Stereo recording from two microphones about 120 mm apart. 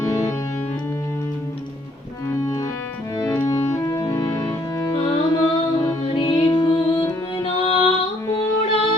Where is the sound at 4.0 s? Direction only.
30° left (ahead or behind).